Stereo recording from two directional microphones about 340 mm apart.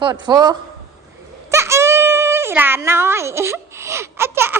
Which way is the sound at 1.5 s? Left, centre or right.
Centre.